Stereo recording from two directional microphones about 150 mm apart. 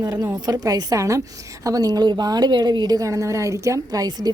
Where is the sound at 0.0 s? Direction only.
25° right (ahead or behind).